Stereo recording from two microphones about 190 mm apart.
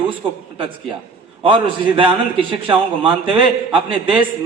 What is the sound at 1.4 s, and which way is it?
Speech, 25° right (ahead or behind).